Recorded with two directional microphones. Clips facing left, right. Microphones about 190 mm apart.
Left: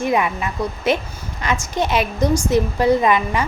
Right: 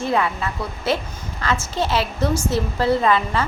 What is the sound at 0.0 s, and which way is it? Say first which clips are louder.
A woman's voice: left 2 dB; 15° left (ahead or behind).